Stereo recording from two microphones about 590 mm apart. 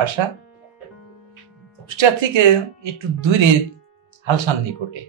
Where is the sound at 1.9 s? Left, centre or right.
Right.